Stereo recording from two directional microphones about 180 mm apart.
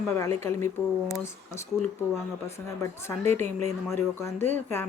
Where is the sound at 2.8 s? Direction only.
15° left (ahead or behind).